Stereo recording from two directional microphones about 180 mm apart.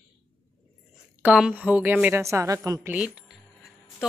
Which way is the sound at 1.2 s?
5° right (ahead or behind).